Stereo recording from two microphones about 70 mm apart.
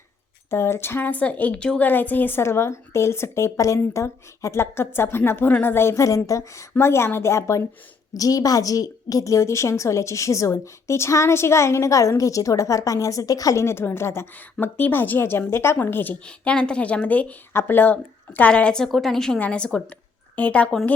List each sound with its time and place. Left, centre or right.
0.5 s a woman's voice: left; by 1.9 s centre
1.9 s a woman's voice: left
6.7 s a woman's voice: left
8.1 s a woman's voice: left
13.6 s a woman's voice: left
16.2 s speech: centre
17.5 s a woman's voice: left; by 18.9 s centre
18.9 s a woman's voice: centre; by 20.7 s left